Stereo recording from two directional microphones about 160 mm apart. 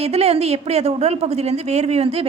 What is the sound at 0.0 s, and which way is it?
A woman's voice, 40° right (ahead or behind).